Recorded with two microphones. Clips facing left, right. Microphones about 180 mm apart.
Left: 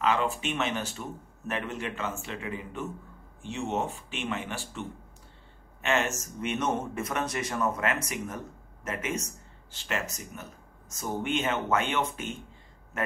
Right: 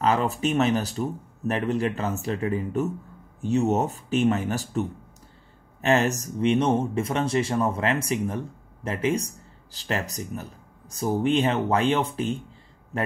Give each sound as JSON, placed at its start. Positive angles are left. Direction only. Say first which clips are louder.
{"t": 0.0, "sound": "speech", "louder": "right 4 dB", "side_deg": -40}